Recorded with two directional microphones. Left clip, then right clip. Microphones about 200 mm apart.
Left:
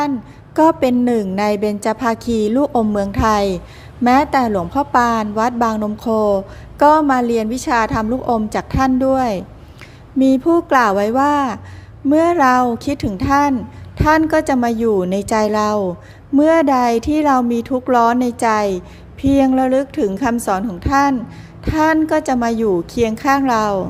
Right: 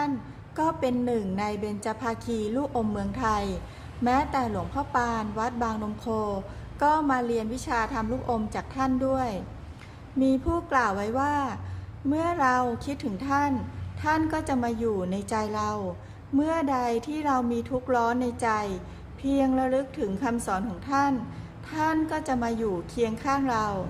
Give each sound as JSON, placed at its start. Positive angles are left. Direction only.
{"t": 0.5, "sound": "a woman's voice", "side_deg": 40}